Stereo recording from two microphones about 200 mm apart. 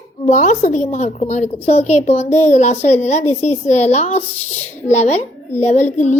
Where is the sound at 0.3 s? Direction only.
35° left (ahead or behind).